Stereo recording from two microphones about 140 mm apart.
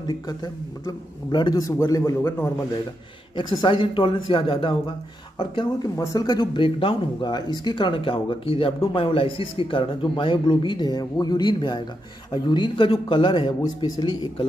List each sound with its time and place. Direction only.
0.0 s a man's voice: 30° left (ahead or behind)
3.3 s speech: 35° left (ahead or behind)